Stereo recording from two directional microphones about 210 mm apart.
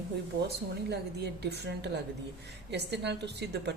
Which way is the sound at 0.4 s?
50° right (ahead or behind).